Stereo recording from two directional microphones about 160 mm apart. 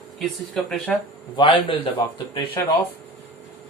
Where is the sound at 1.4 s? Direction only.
30° left (ahead or behind).